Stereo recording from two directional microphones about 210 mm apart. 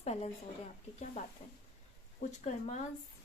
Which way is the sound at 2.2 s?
35° left (ahead or behind).